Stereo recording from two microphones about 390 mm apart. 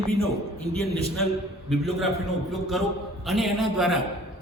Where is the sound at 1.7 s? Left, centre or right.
Centre.